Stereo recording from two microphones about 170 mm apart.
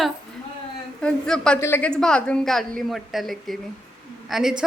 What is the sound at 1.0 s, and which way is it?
A woman's voice, 5° left (ahead or behind).